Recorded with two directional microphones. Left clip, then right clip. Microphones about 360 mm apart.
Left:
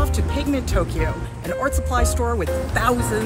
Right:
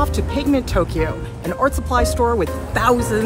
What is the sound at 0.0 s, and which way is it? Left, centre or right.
Speech, centre.